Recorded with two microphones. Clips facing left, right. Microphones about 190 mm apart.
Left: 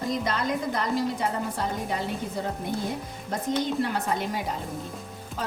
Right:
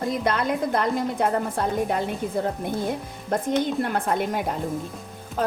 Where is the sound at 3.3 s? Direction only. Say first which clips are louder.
Right 4 dB; 55° right (ahead or behind).